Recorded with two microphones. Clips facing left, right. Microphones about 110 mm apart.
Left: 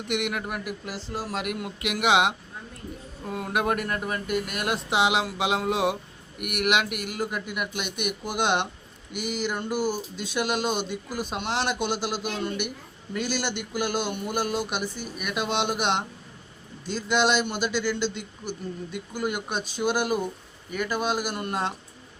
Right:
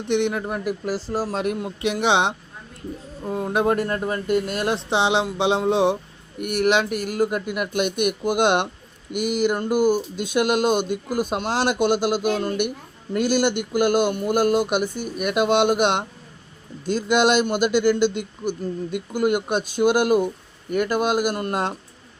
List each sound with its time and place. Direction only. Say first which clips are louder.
0.1 s speech: right 7 dB; 30° right (ahead or behind); by 21.7 s 45° right (ahead or behind)